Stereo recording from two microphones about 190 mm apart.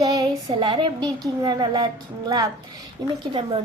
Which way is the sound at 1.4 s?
20° right (ahead or behind).